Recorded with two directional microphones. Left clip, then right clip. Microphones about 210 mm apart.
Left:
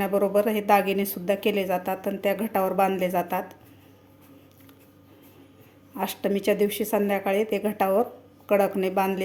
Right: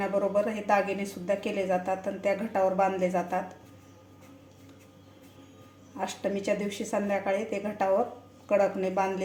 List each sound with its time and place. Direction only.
0.0 s a woman's voice: 45° left (ahead or behind)
6.0 s a woman's voice: 40° left (ahead or behind)